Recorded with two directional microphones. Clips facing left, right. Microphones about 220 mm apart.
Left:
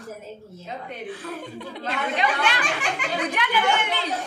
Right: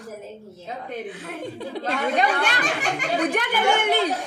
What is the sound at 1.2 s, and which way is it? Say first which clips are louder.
Speech: right 2 dB; 35° right (ahead or behind).